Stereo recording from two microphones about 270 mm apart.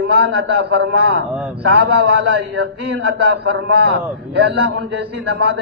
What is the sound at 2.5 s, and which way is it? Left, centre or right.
A man's voice, right.